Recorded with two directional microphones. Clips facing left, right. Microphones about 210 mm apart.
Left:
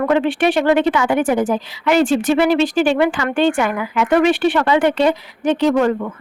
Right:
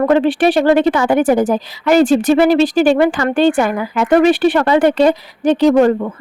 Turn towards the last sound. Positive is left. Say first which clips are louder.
# right 5 dB
turn(degrees=-35)  # may be behind; listen again after turning